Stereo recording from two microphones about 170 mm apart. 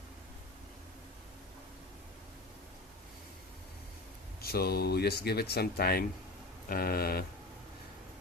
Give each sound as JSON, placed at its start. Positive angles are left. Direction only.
{"t": 4.4, "sound": "speech", "side_deg": 65}